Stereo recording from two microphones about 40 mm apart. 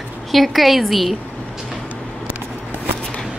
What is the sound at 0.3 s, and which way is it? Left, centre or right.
Speech, centre.